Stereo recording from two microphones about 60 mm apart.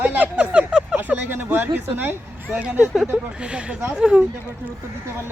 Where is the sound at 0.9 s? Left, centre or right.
Right.